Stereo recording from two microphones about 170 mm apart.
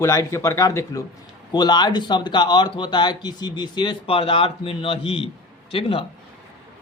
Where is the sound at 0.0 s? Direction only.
15° left (ahead or behind).